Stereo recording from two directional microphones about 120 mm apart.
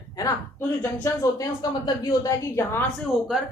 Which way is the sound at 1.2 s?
30° left (ahead or behind).